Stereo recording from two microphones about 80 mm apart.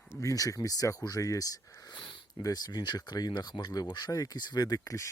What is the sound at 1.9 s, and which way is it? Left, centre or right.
Sniff, left.